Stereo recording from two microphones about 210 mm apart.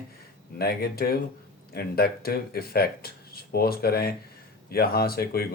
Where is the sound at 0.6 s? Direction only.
50° left (ahead or behind).